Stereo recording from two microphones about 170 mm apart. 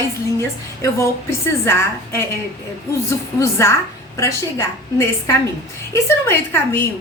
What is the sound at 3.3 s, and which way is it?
A woman's voice, 15° left (ahead or behind).